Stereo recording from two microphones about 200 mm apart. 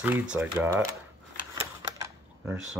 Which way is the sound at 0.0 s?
5° right (ahead or behind).